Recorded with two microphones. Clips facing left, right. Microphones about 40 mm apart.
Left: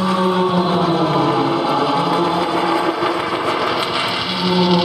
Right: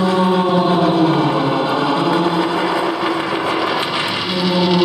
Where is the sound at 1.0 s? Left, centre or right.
Centre.